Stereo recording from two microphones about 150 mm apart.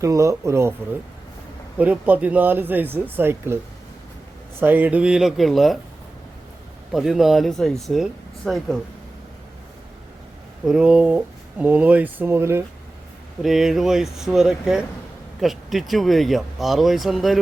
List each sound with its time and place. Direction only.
0.0 s speech: 20° right (ahead or behind)
1.8 s speech: 10° right (ahead or behind)
4.6 s speech: 15° right (ahead or behind)
6.9 s speech: centre (ahead or behind)
10.7 s speech: 5° right (ahead or behind)
13.4 s speech: centre (ahead or behind)